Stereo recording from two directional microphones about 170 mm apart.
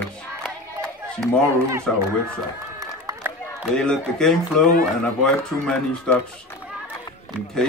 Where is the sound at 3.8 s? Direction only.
5° left (ahead or behind).